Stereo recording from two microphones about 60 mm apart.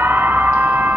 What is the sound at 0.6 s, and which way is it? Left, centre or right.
Music, right.